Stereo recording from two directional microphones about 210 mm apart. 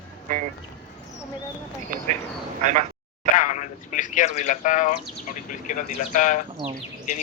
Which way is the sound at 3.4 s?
35° left (ahead or behind).